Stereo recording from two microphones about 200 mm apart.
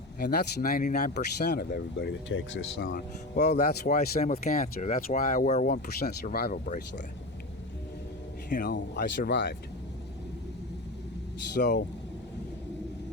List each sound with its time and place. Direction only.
0.2 s speech: 50° left (ahead or behind)
5.6 s speech: 50° left (ahead or behind)
8.4 s speech: 40° left (ahead or behind)
8.7 s speech: 55° left (ahead or behind)
11.5 s speech: 60° left (ahead or behind)